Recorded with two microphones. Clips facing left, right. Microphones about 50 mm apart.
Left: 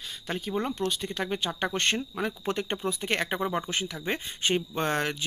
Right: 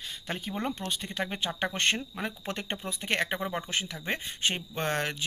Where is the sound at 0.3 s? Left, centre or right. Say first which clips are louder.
Left 3 dB; centre.